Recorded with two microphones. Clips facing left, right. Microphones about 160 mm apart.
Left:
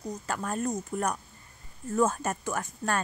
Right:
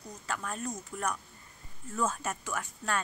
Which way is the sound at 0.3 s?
40° left (ahead or behind).